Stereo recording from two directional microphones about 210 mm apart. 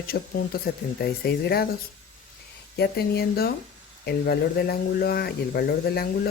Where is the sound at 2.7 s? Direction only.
50° left (ahead or behind).